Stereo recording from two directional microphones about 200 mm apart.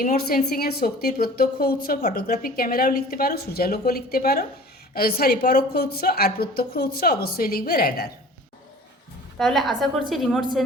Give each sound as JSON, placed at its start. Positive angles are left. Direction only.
{"t": 0.0, "sound": "a woman's voice", "side_deg": 45}
{"t": 9.4, "sound": "a woman's voice", "side_deg": 0}